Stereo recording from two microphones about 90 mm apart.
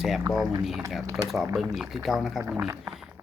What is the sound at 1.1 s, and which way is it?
Speech, centre (ahead or behind).